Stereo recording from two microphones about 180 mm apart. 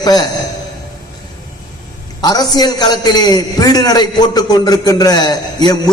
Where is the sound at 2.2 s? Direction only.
20° left (ahead or behind).